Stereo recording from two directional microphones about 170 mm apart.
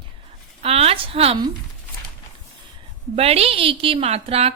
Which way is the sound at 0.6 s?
35° right (ahead or behind).